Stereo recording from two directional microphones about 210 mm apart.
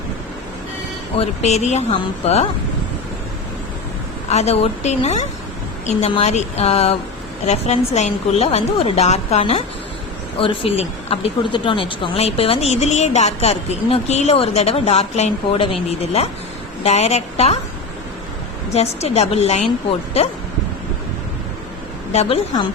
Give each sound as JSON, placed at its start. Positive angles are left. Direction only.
{"t": 1.1, "sound": "a woman's voice", "side_deg": 30}
{"t": 4.3, "sound": "a woman's voice", "side_deg": 30}
{"t": 18.7, "sound": "a woman's voice", "side_deg": 30}
{"t": 22.1, "sound": "a woman's voice", "side_deg": 30}